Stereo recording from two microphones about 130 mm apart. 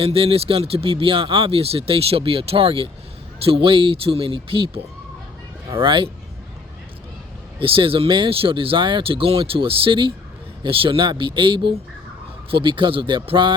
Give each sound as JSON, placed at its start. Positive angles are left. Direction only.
{"t": 0.0, "sound": "speech", "side_deg": -45}
{"t": 7.6, "sound": "speech", "side_deg": -45}